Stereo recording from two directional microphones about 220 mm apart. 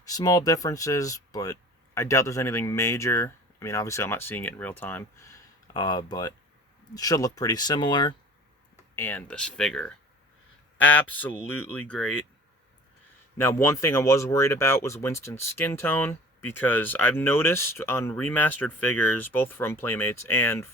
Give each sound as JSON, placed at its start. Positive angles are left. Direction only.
{"t": 0.0, "sound": "speech", "side_deg": 15}
{"t": 9.0, "sound": "speech", "side_deg": 10}
{"t": 13.4, "sound": "speech", "side_deg": 10}